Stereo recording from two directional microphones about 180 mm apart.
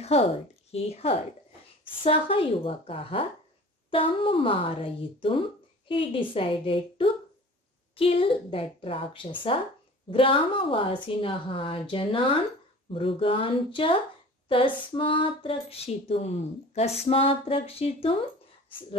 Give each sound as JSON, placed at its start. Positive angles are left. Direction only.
{"t": 0.7, "sound": "a woman's voice", "side_deg": 35}